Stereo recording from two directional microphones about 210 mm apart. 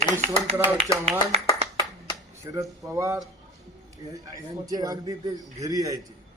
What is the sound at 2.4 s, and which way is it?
A man's voice, 15° right (ahead or behind).